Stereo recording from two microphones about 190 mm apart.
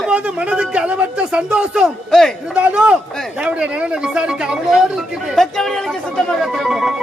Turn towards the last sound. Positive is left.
turn(degrees=0)  # may be behind; listen again after turning